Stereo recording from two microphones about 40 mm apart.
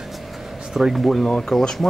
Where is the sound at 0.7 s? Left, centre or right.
Centre.